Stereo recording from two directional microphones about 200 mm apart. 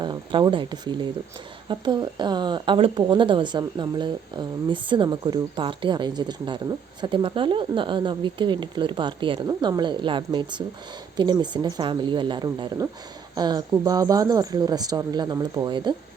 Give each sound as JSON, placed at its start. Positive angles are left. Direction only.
{"t": 0.0, "sound": "speech", "side_deg": -25}